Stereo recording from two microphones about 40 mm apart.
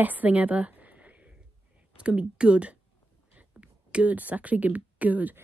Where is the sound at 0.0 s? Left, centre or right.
Right.